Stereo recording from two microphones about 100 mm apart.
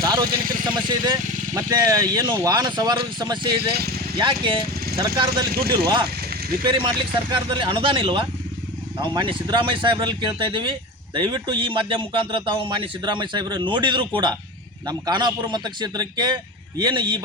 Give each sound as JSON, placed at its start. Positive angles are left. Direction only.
{"t": 0.0, "sound": "vehicle", "side_deg": -35}
{"t": 0.6, "sound": "speech", "side_deg": -50}
{"t": 1.1, "sound": "speech", "side_deg": -35}
{"t": 4.2, "sound": "speech", "side_deg": -55}
{"t": 4.9, "sound": "speech", "side_deg": -45}